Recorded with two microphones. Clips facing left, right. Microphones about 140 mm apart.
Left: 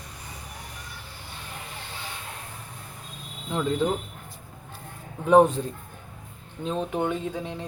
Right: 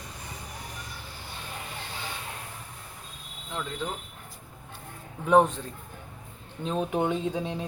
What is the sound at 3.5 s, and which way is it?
Speech, 25° left (ahead or behind).